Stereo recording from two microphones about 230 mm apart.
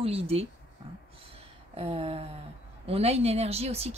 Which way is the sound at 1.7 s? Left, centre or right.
Right.